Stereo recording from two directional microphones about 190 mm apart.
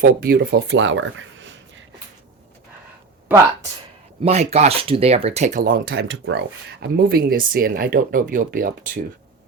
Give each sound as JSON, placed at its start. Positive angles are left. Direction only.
{"t": 0.0, "sound": "speech", "side_deg": -50}
{"t": 4.2, "sound": "speech", "side_deg": -35}